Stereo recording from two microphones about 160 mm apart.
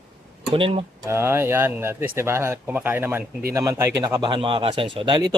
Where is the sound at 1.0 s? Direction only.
15° right (ahead or behind).